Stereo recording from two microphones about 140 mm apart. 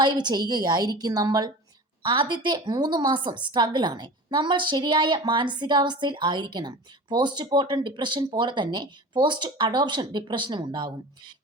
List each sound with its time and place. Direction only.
0.0 s a woman's voice: 30° right (ahead or behind)